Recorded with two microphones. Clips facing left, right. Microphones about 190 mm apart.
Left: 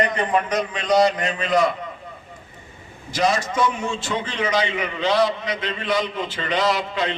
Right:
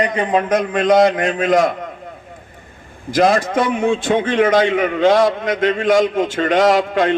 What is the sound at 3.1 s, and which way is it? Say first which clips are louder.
A man's voice: right 7 dB; 55° right (ahead or behind).